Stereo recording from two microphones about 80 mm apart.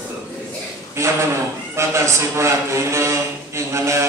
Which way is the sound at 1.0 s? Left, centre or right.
Right.